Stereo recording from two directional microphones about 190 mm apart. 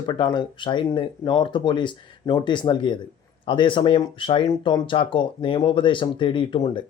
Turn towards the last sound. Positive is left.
turn(degrees=25)  # may be behind; listen again after turning